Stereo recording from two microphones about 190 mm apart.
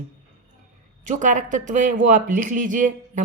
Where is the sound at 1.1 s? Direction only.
40° right (ahead or behind).